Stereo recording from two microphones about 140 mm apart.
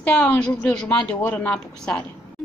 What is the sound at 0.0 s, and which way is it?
A woman's voice, 10° left (ahead or behind).